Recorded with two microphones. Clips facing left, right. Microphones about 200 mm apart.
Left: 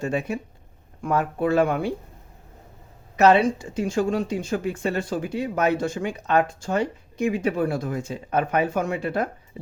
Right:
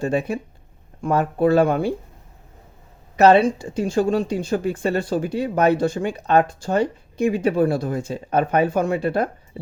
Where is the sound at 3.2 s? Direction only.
35° right (ahead or behind).